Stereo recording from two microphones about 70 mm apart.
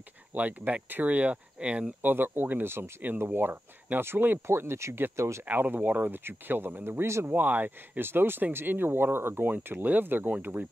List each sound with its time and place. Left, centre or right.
0.3 s speech: right
2.0 s speech: right
5.4 s speech: right